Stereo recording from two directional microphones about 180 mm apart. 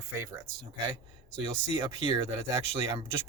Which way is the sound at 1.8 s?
25° right (ahead or behind).